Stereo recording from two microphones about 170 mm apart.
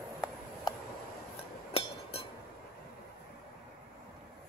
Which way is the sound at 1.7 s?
35° left (ahead or behind).